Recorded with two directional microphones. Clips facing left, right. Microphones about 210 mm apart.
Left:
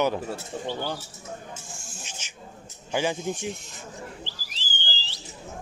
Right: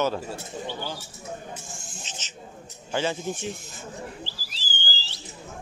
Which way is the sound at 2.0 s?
10° left (ahead or behind).